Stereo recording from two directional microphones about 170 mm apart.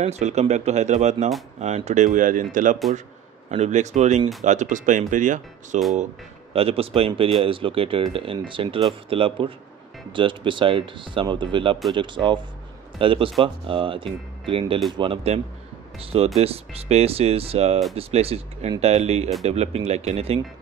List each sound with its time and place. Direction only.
0.0 s speech: 40° right (ahead or behind)
3.4 s speech: 40° right (ahead or behind)
6.5 s speech: 35° right (ahead or behind)